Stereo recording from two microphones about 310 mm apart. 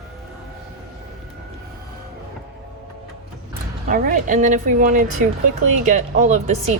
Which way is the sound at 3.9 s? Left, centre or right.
Right.